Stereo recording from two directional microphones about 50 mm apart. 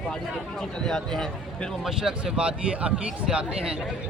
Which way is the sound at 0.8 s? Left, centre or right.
Centre.